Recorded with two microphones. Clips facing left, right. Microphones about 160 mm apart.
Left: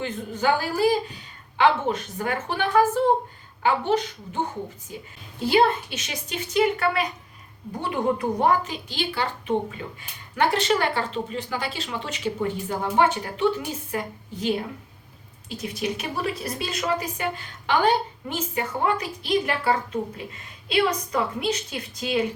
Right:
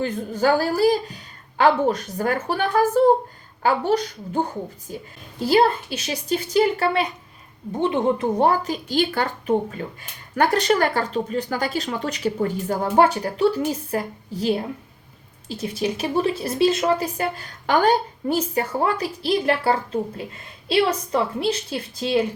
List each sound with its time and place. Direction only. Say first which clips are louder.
0.0 s a woman's voice: right 4 dB; 40° right (ahead or behind)